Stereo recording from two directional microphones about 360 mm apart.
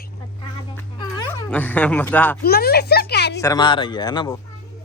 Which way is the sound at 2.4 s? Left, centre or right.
Left.